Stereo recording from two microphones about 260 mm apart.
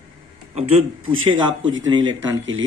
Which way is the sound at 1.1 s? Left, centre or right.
Right.